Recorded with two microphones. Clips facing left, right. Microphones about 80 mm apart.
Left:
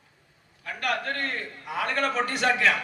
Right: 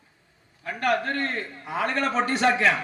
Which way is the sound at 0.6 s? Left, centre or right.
Right.